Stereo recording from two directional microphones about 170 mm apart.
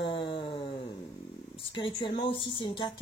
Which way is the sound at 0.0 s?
30° left (ahead or behind).